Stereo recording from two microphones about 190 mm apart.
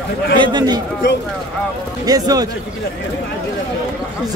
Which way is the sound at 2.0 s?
20° right (ahead or behind).